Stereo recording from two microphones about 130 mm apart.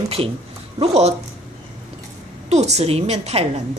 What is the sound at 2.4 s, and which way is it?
A woman's voice, 60° right (ahead or behind).